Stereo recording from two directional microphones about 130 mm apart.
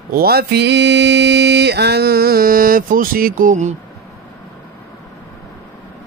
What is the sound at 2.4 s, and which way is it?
Speech, 90° right.